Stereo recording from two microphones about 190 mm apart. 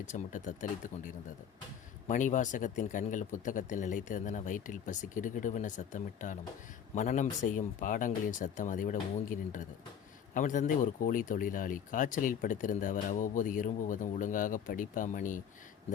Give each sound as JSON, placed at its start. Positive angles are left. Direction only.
{"t": 0.0, "sound": "speech", "side_deg": 40}